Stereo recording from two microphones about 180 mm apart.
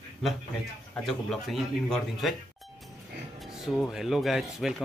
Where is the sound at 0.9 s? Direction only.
Centre (ahead or behind).